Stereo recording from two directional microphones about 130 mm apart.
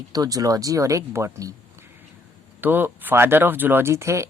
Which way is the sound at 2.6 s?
15° right (ahead or behind).